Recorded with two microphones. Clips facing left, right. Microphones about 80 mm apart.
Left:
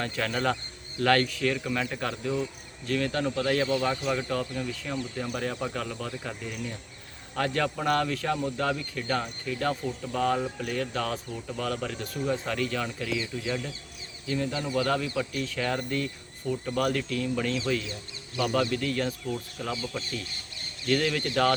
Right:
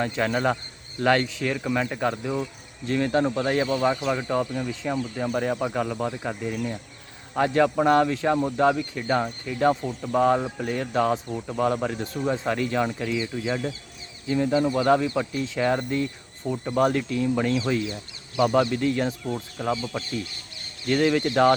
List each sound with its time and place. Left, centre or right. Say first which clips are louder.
0.0 s speech: right 5 dB; right